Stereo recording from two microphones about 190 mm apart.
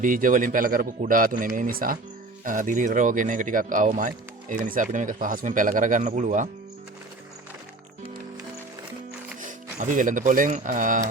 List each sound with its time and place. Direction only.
0.0 s speech: 45° right (ahead or behind)
9.4 s speech: 40° right (ahead or behind)